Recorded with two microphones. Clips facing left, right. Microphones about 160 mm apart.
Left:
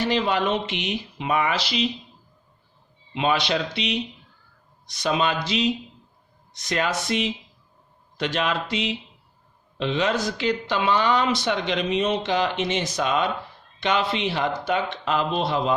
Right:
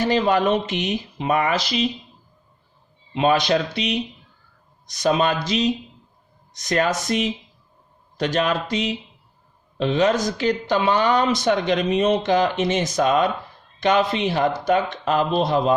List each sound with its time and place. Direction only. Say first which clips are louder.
0.0 s speech: right 4 dB; 45° right (ahead or behind)
3.2 s speech: right 4 dB; 45° right (ahead or behind)